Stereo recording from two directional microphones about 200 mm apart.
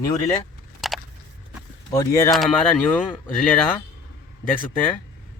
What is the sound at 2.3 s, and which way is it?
Speech, 5° left (ahead or behind).